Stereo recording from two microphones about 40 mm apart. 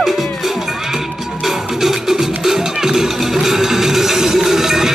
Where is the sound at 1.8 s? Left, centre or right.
Centre.